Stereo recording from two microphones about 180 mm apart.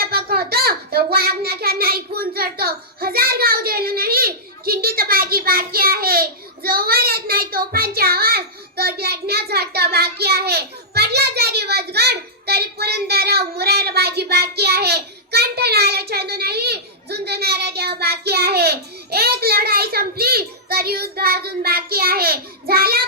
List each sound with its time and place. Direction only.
0.0 s child singing: 60° right (ahead or behind)